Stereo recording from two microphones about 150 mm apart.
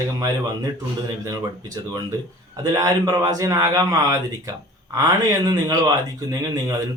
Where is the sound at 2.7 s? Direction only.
25° right (ahead or behind).